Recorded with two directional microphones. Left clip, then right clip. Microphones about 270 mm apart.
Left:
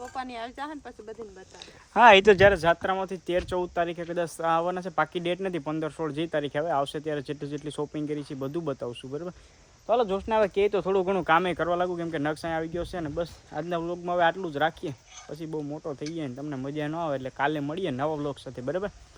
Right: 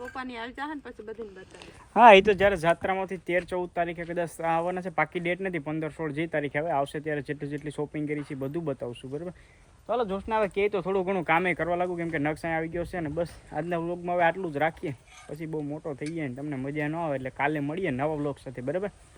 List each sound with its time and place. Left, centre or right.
0.1 s speech: centre
2.2 s speech: left
2.6 s speech: centre